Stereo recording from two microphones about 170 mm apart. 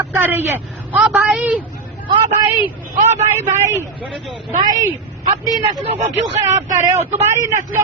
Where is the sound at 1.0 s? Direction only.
Centre (ahead or behind).